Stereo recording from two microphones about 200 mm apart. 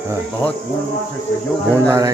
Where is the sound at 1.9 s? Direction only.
15° right (ahead or behind).